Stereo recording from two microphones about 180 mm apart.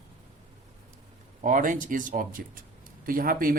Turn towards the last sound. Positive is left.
turn(degrees=-50)  # may be behind; listen again after turning